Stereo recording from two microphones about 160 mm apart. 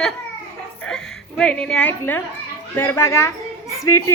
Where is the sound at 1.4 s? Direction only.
5° left (ahead or behind).